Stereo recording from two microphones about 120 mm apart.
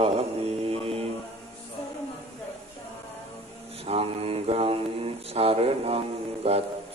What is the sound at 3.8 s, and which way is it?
Mantra, 55° right (ahead or behind).